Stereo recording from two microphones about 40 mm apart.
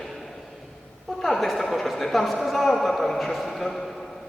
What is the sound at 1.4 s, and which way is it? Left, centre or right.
A man's voice, centre.